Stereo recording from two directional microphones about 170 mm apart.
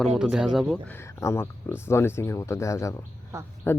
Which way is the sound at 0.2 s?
5° right (ahead or behind).